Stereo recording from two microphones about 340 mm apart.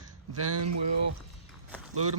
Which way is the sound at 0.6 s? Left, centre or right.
Right.